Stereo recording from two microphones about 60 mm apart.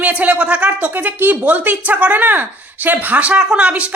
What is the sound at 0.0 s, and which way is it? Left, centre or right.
Speech, right.